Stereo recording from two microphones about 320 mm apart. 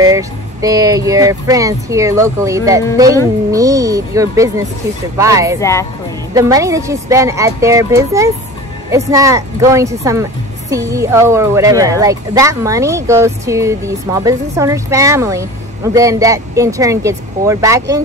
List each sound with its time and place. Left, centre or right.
0.0 s speech: centre
5.6 s speech: centre
6.3 s speech: centre